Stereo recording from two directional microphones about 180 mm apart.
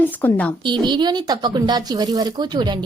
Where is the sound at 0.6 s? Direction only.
25° right (ahead or behind).